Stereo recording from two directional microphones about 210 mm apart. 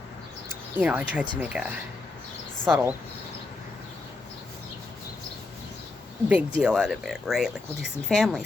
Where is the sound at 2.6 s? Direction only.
5° right (ahead or behind).